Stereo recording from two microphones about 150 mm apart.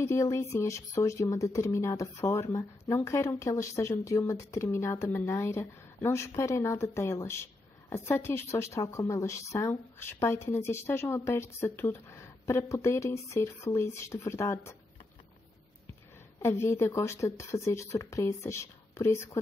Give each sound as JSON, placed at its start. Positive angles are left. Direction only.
{"t": 0.0, "sound": "a woman's voice", "side_deg": 20}
{"t": 16.3, "sound": "speech", "side_deg": 15}